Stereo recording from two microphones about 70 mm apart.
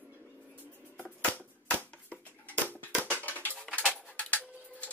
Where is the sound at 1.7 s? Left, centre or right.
Left.